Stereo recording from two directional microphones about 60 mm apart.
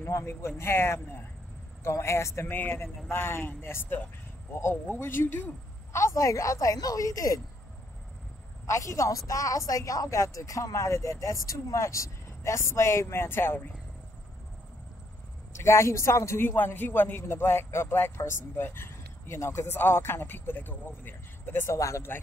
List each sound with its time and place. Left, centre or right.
0.2 s speech: left
2.5 s speech: left
5.9 s speech: left
8.6 s speech: left
15.5 s speech: left
16.3 s speech: left
21.6 s speech: left